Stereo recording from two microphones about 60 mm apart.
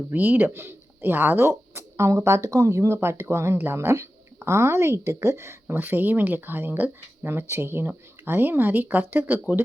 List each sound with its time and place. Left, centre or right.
0.1 s a woman's voice: right
5.8 s speech: right
7.2 s speech: right